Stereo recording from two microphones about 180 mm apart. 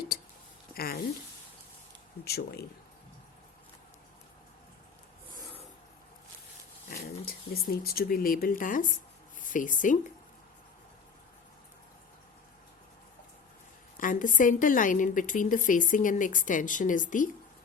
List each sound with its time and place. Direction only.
0.1 s a sound: 60° left (ahead or behind)
2.2 s speech: 65° left (ahead or behind)
6.8 s dog: 60° left (ahead or behind)
7.3 s a woman's voice: 55° left (ahead or behind)
13.9 s a woman's voice: 50° left (ahead or behind)